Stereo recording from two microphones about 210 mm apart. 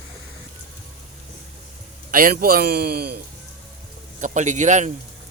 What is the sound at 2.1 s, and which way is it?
A man's voice, 40° right (ahead or behind).